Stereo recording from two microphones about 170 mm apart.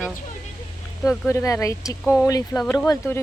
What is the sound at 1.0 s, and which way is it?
Speech, centre (ahead or behind).